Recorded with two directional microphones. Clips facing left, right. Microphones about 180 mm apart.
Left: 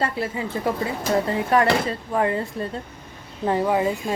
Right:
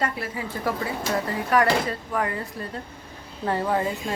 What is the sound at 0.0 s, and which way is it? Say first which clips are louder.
Speech: left 3 dB; 25° left (ahead or behind).